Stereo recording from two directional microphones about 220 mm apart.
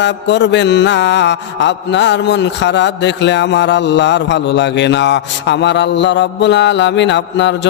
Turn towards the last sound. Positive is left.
turn(degrees=55)  # may be behind; listen again after turning